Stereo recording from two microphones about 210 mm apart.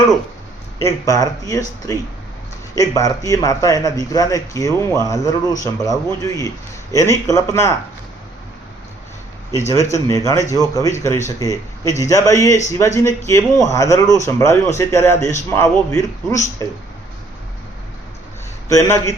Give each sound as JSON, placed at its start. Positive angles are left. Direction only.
{"t": 0.8, "sound": "speech", "side_deg": 15}
{"t": 9.5, "sound": "speech", "side_deg": 15}
{"t": 18.7, "sound": "speech", "side_deg": 15}